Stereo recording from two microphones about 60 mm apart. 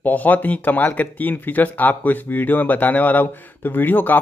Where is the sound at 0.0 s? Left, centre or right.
Left.